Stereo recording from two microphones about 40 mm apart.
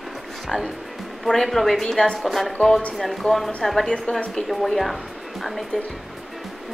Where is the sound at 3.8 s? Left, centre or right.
Left.